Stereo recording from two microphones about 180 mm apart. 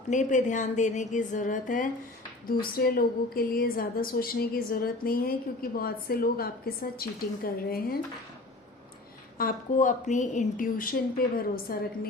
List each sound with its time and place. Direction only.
0.1 s a woman's voice: 45° left (ahead or behind)
9.4 s speech: 50° left (ahead or behind)